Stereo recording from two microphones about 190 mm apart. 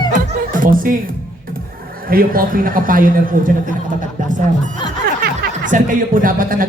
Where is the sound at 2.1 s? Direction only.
50° right (ahead or behind).